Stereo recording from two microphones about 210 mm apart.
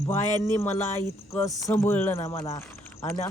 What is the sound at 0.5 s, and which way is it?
Speech, 10° left (ahead or behind).